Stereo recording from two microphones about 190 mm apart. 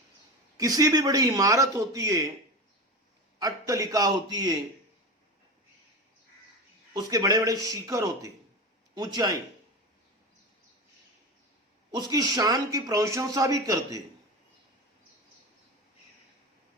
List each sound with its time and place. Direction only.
0.5 s speech: 20° right (ahead or behind)
3.3 s speech: 20° right (ahead or behind)
6.9 s a man's voice: 20° right (ahead or behind)
11.9 s speech: 20° right (ahead or behind)